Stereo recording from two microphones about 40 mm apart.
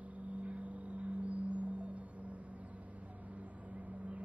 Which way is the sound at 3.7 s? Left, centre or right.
Right.